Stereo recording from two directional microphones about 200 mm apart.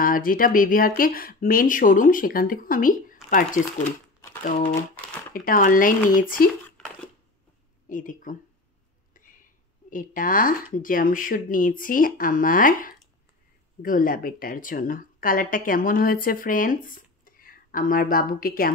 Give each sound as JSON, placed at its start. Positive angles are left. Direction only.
{"t": 0.0, "sound": "a woman's voice", "side_deg": 45}
{"t": 5.3, "sound": "a woman's voice", "side_deg": 45}
{"t": 7.9, "sound": "speech", "side_deg": 40}
{"t": 9.8, "sound": "a woman's voice", "side_deg": 40}